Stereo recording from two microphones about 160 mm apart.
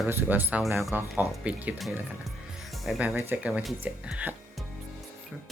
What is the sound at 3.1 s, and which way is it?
Speech, 15° right (ahead or behind).